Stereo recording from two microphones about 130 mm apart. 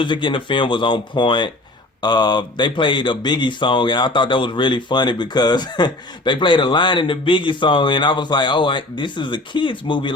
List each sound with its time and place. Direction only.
0.0 s speech: 40° left (ahead or behind)